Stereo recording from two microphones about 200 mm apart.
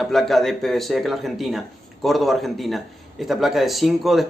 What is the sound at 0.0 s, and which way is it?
Speech, centre (ahead or behind).